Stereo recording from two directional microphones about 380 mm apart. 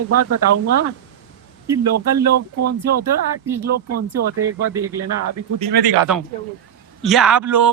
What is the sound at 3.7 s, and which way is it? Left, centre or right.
Speech, right.